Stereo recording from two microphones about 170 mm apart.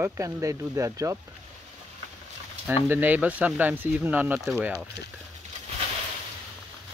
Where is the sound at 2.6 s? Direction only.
10° right (ahead or behind).